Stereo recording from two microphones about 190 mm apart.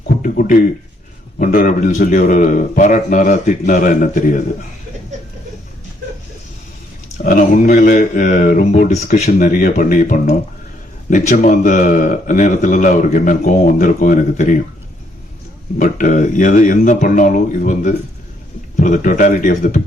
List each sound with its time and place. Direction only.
0.2 s a sound: 45° left (ahead or behind)
1.4 s a man's voice: 45° left (ahead or behind)
7.2 s a man's voice: 45° left (ahead or behind)
15.8 s a man's voice: 45° left (ahead or behind)